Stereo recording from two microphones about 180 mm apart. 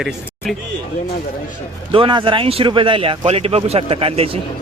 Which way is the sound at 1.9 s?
25° right (ahead or behind).